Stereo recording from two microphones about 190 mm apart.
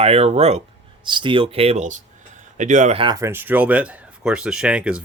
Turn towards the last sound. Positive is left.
turn(degrees=-5)  # may be behind; listen again after turning